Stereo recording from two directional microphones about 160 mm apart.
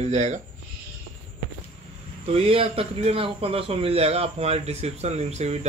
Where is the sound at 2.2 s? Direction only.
40° right (ahead or behind).